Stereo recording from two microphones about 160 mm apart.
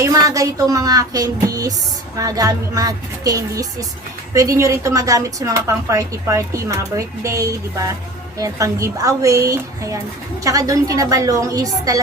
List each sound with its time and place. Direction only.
0.0 s a woman's voice: 20° right (ahead or behind)